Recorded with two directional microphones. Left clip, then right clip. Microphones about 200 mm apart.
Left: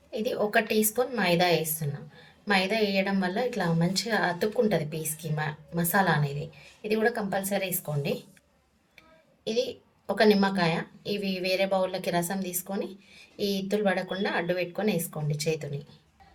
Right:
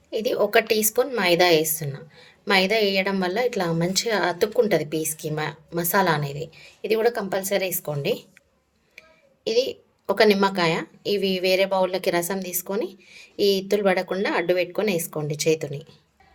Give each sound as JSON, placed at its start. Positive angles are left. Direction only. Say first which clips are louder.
{"t": 0.1, "sound": "a woman's voice", "louder": "right 6 dB", "side_deg": -50}
{"t": 10.1, "sound": "a woman's voice", "louder": "right 5 dB", "side_deg": -50}